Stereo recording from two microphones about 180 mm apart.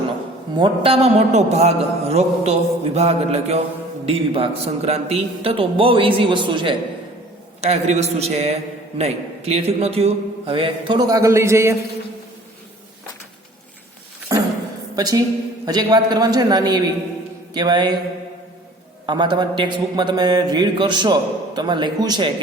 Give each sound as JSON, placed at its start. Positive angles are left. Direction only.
{"t": 0.5, "sound": "a man's voice", "side_deg": -30}
{"t": 7.6, "sound": "a man's voice", "side_deg": -40}
{"t": 14.9, "sound": "a woman's voice", "side_deg": -20}
{"t": 19.0, "sound": "a man's voice", "side_deg": -25}